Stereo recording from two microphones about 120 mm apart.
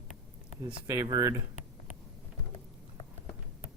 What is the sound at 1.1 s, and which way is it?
Speech, 30° right (ahead or behind).